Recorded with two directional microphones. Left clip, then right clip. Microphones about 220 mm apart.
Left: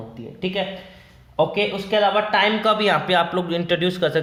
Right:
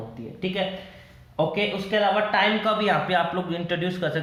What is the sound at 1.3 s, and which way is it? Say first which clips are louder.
Speech: left 4 dB; 35° left (ahead or behind).